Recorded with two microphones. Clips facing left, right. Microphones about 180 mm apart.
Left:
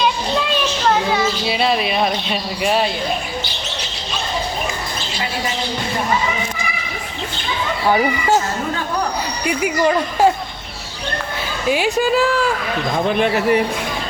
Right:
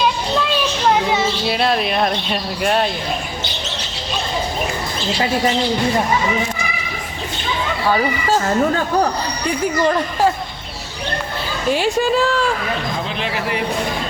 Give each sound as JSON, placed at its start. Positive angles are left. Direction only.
{"t": 1.5, "sound": "speech", "side_deg": 0}
{"t": 7.9, "sound": "speech", "side_deg": 15}
{"t": 9.6, "sound": "speech", "side_deg": 10}
{"t": 11.7, "sound": "speech", "side_deg": 5}
{"t": 13.1, "sound": "speech", "side_deg": 50}